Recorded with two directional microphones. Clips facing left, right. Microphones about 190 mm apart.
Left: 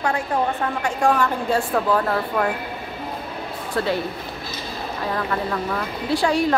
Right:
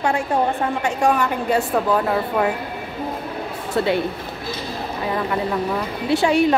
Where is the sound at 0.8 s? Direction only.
20° right (ahead or behind).